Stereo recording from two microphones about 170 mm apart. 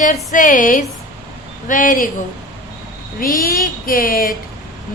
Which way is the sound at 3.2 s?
60° left (ahead or behind).